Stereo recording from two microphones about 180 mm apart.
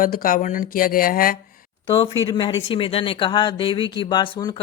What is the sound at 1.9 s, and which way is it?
Speech, 30° left (ahead or behind).